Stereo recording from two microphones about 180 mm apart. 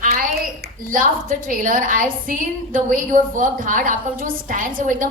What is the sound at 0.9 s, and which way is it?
A woman's voice, 50° right (ahead or behind).